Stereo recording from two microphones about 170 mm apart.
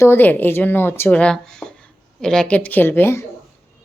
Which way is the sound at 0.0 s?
10° left (ahead or behind).